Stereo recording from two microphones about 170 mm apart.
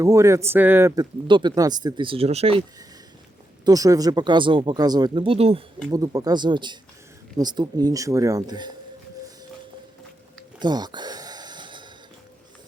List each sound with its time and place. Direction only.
0.0 s speech: 20° right (ahead or behind); by 2.6 s 35° right (ahead or behind)
3.7 s speech: 20° right (ahead or behind)
5.9 s speech: 20° right (ahead or behind)
10.6 s a sound: 25° right (ahead or behind)